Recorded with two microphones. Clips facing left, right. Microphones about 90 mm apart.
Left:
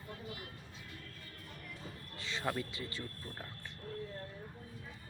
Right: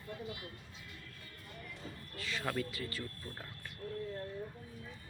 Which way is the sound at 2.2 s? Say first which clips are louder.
Even; 25° left (ahead or behind).